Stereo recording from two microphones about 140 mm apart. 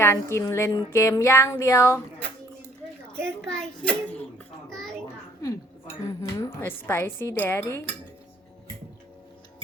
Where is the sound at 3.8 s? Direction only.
10° left (ahead or behind).